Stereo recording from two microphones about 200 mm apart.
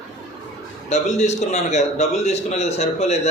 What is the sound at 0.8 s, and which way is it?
A man's voice, 35° left (ahead or behind).